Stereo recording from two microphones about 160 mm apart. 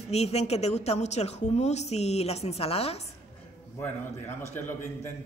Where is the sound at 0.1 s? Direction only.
40° left (ahead or behind).